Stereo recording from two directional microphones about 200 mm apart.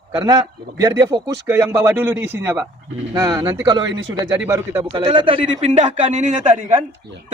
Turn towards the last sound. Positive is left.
turn(degrees=-35)  # may be behind; listen again after turning